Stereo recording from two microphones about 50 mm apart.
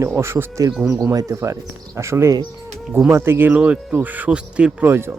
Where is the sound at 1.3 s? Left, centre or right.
Right.